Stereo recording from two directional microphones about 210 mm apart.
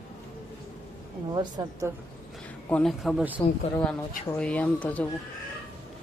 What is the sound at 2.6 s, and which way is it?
Speech, 5° left (ahead or behind).